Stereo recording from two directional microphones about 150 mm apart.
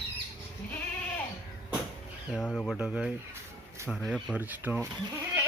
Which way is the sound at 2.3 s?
5° right (ahead or behind).